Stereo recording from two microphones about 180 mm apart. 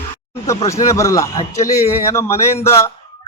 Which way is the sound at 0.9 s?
15° left (ahead or behind).